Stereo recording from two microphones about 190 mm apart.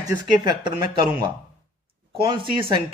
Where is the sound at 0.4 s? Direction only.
25° right (ahead or behind).